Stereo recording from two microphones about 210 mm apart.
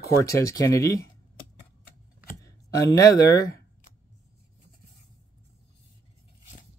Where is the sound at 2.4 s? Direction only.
15° left (ahead or behind).